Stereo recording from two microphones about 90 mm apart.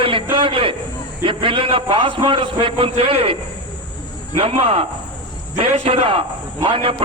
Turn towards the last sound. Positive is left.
turn(degrees=-90)